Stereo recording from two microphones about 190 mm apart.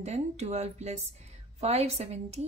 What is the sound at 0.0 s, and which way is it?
A woman's voice, 35° right (ahead or behind).